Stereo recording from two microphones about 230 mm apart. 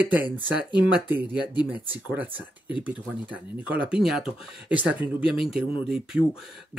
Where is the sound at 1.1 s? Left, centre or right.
Centre.